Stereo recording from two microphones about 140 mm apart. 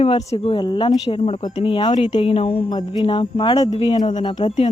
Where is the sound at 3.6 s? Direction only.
50° left (ahead or behind).